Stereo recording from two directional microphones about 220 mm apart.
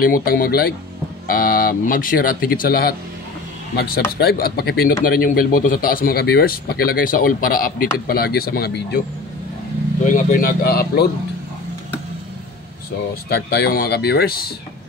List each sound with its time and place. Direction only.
0.0 s speech: 40° left (ahead or behind)
10.0 s speech: 35° left (ahead or behind)
13.3 s speech: 45° left (ahead or behind)